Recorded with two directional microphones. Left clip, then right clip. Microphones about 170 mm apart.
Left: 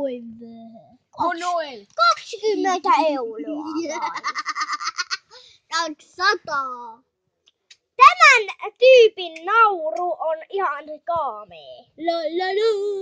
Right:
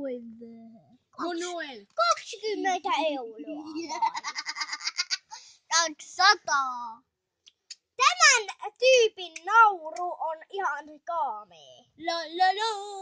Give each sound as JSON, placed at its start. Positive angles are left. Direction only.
{"t": 0.0, "sound": "a sound", "side_deg": 10}
{"t": 2.1, "sound": "a child's voice", "side_deg": 10}
{"t": 4.1, "sound": "goat", "side_deg": -30}
{"t": 5.3, "sound": "a child's voice", "side_deg": -55}
{"t": 7.9, "sound": "a child's voice", "side_deg": 5}
{"t": 12.0, "sound": "a woman's voice", "side_deg": -65}